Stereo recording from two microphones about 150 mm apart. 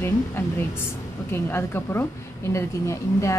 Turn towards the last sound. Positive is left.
turn(degrees=20)  # may be behind; listen again after turning